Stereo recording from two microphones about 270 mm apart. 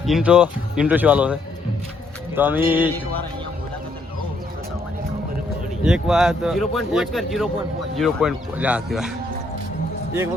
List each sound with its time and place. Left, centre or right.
0.0 s speech: centre
5.8 s speech: centre